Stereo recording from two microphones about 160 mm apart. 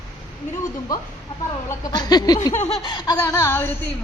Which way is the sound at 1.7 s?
25° left (ahead or behind).